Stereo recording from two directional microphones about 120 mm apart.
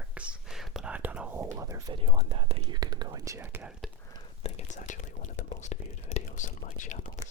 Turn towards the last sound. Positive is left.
turn(degrees=85)